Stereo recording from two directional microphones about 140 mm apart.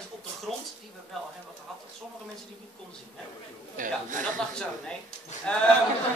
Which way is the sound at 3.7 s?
70° right (ahead or behind).